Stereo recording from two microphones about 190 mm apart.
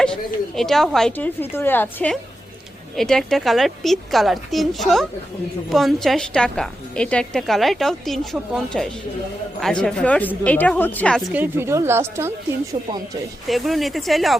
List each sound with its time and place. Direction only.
0.0 s a woman's voice: 5° left (ahead or behind)
11.3 s speech: 10° right (ahead or behind)
12.7 s speech: 30° right (ahead or behind)
13.5 s a woman's voice: centre (ahead or behind)